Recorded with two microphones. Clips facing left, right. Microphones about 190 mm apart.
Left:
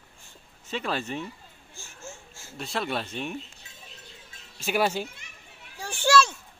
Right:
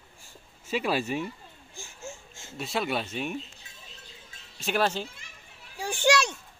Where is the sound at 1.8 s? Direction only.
20° right (ahead or behind).